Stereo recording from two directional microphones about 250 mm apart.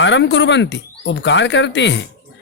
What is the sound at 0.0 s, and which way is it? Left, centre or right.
A man's voice, left.